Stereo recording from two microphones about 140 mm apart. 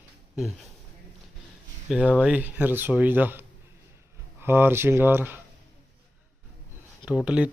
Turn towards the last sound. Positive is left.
turn(degrees=-10)  # may be behind; listen again after turning